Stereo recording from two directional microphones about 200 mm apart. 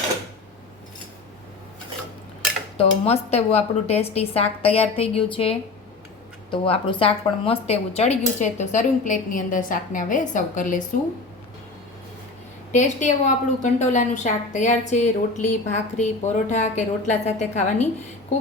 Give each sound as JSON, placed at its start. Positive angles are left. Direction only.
{"t": 2.7, "sound": "speech", "side_deg": 30}
{"t": 12.7, "sound": "speech", "side_deg": 35}